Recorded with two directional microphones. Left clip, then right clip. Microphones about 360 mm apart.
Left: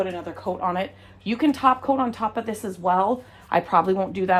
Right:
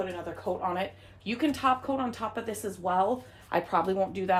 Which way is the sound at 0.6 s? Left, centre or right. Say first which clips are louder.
Left 6 dB; centre.